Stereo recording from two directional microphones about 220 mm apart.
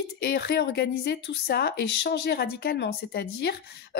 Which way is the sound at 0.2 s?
45° left (ahead or behind).